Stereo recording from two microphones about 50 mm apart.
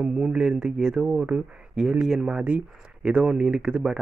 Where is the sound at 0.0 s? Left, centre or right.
Right.